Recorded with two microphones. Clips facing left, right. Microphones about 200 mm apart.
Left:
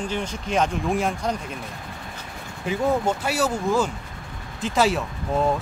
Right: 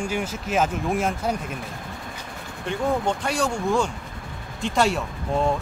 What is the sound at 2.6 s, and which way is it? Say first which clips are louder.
Speech: left 2 dB; 5° left (ahead or behind).